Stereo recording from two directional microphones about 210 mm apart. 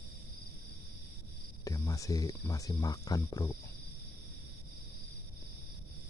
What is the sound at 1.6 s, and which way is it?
Speech, 15° left (ahead or behind).